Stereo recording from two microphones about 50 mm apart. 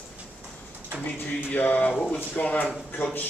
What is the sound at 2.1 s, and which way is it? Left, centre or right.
Speech, left.